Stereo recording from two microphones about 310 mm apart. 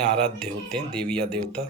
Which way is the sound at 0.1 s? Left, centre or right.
Centre.